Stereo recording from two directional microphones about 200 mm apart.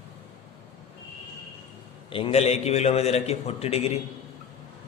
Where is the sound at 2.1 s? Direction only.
30° left (ahead or behind).